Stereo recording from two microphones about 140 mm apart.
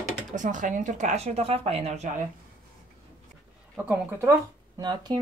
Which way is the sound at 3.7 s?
15° right (ahead or behind).